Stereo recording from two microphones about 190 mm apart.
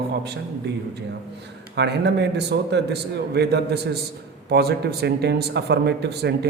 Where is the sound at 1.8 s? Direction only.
65° right (ahead or behind).